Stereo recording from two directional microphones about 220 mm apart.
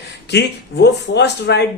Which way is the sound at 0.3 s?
50° left (ahead or behind).